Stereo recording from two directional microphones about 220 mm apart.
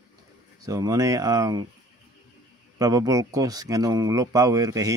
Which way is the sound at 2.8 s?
15° right (ahead or behind).